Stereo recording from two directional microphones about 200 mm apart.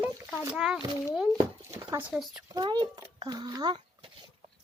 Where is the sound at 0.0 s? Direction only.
10° right (ahead or behind).